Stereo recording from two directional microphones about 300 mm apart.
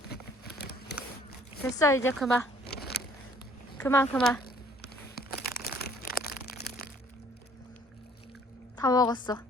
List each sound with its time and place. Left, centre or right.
0.1 s a sound: left
1.6 s speech: centre
2.7 s biting: left
3.8 s speech: centre
5.1 s a sound: left
8.8 s a woman's voice: centre